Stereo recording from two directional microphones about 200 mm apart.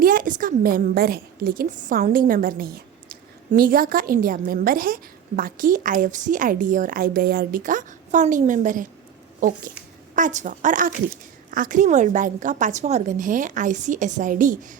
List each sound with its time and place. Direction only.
0.0 s a woman's voice: 45° right (ahead or behind)
10.2 s a woman's voice: 40° right (ahead or behind)